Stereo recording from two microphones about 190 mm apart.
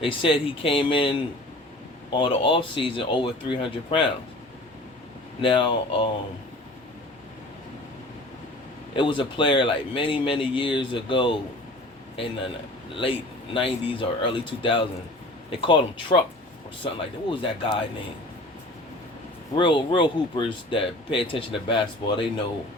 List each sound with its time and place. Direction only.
0.0 s speech: 30° left (ahead or behind)
5.4 s speech: 25° left (ahead or behind)
9.0 s speech: 25° left (ahead or behind)
13.0 s speech: 25° left (ahead or behind)
19.5 s speech: 25° left (ahead or behind)